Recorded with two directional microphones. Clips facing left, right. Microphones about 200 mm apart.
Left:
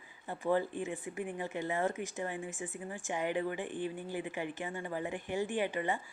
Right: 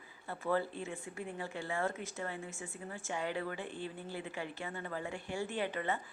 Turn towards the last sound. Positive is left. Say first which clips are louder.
# left 3 dB
turn(degrees=15)  # may be behind; listen again after turning